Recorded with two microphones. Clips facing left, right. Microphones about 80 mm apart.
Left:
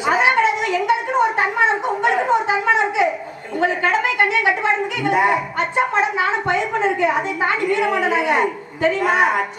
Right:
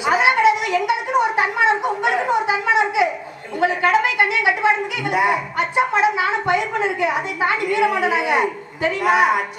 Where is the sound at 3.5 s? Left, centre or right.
Centre.